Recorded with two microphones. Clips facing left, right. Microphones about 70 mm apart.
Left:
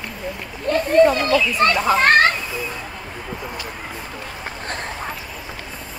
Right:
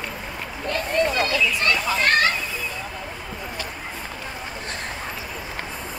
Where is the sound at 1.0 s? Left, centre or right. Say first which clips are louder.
Left 10 dB; left.